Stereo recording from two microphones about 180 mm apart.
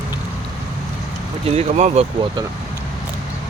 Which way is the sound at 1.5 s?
35° right (ahead or behind).